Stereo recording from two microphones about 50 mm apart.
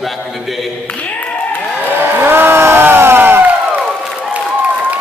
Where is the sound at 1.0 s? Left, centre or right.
Left.